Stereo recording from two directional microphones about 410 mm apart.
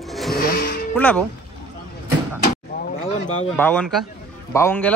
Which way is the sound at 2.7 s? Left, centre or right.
Left.